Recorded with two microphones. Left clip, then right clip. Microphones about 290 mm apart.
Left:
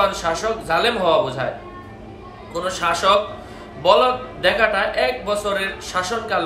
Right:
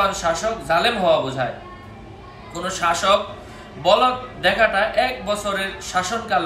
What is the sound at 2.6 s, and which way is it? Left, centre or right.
A man's voice, centre.